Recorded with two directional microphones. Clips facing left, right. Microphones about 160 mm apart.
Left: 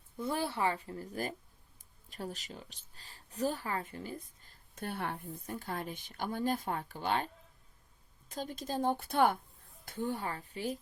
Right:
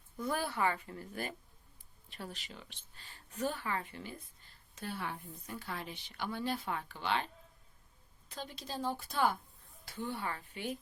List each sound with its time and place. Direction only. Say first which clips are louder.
0.2 s a woman's voice: left 1 dB; 25° left (ahead or behind); by 7.3 s 45° left (ahead or behind)
8.3 s a woman's voice: left 6 dB; 45° left (ahead or behind)